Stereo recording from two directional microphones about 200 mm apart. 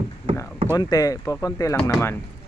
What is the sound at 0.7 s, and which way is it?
Speech, 20° left (ahead or behind).